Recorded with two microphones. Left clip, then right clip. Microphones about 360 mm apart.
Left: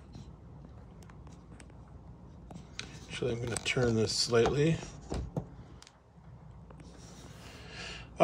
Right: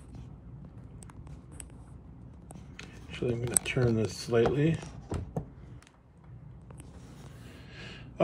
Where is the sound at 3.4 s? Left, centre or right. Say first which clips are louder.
Left 1 dB; left.